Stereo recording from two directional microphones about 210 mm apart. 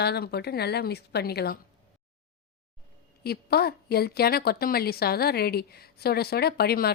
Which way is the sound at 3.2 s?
50° left (ahead or behind).